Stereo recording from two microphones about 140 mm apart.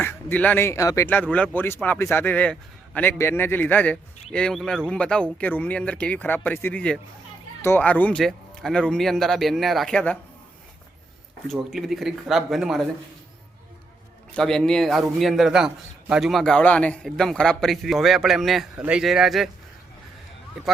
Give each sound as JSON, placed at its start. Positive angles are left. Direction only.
{"t": 0.0, "sound": "a man's voice", "side_deg": 10}
{"t": 1.0, "sound": "a man's voice", "side_deg": 10}
{"t": 11.7, "sound": "a man's voice", "side_deg": 0}
{"t": 14.3, "sound": "a man's voice", "side_deg": 5}